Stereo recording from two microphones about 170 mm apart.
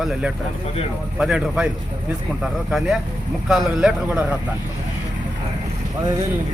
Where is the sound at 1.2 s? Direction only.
5° right (ahead or behind).